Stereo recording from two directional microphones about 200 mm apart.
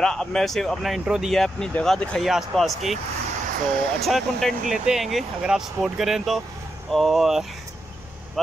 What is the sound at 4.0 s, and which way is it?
Speech, centre (ahead or behind).